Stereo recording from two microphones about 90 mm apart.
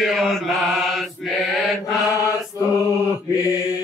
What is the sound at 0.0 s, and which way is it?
Mantra, centre (ahead or behind).